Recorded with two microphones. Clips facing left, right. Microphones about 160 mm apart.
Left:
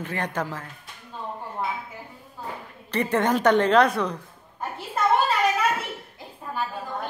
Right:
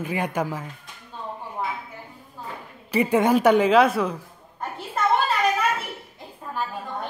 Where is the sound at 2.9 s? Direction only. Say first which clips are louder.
Right 3 dB; 10° right (ahead or behind).